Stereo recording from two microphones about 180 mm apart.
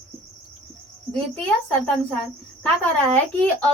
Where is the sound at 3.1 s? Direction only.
10° left (ahead or behind).